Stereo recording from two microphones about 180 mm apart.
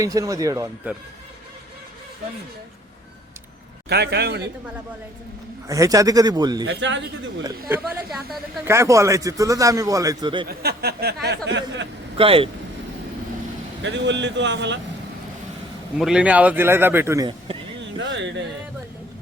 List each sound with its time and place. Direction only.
0.0 s a man's voice: 20° right (ahead or behind)
3.8 s a man's voice: 65° right (ahead or behind)
5.6 s a man's voice: 20° right (ahead or behind)
6.7 s speech: 90° right
7.7 s a woman's voice: 5° right (ahead or behind)
8.6 s a man's voice: 15° right (ahead or behind)
10.5 s a sound: 60° right (ahead or behind)
11.4 s speech: 80° right
12.1 s speech: 30° right (ahead or behind)
13.8 s speech: 80° right
16.0 s a man's voice: 5° right (ahead or behind)